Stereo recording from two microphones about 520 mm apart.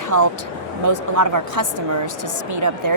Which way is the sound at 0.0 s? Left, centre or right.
Right.